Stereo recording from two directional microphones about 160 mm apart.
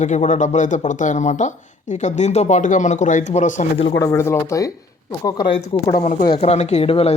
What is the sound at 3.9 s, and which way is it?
Speech, 20° left (ahead or behind).